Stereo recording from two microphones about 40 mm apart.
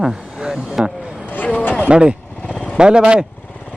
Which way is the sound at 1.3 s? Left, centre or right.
Left.